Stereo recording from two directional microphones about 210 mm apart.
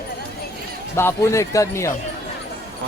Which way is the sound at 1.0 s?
10° left (ahead or behind).